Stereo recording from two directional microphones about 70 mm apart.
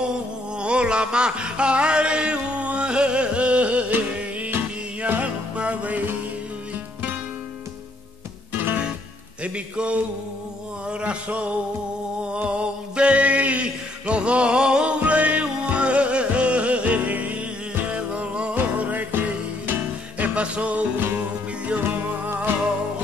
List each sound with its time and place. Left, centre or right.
0.6 s a sound: centre
4.5 s music: right
9.4 s music: centre
12.2 s mantra: centre
18.8 s music: right
21.0 s music: right